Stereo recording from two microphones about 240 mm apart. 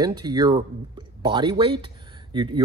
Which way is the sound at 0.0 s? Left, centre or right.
Centre.